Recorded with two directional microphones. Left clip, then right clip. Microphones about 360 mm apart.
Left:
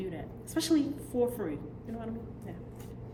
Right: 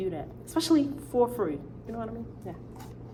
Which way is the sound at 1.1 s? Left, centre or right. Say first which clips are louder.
Right 5 dB; right.